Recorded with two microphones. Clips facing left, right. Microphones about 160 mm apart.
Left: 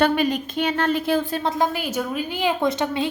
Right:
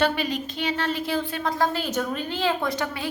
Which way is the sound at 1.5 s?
15° left (ahead or behind).